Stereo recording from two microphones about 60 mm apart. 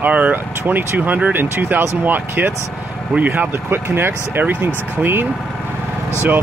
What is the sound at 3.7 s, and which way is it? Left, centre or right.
Speech, right.